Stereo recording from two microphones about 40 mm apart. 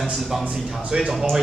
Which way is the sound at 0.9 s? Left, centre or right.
Right.